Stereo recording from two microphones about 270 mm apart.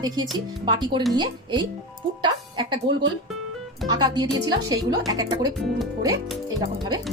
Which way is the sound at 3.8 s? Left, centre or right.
Centre.